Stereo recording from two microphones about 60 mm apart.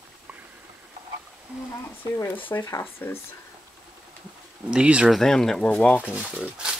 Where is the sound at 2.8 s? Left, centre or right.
Left.